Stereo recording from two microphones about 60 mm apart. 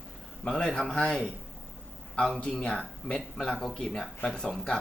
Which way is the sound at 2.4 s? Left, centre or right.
Centre.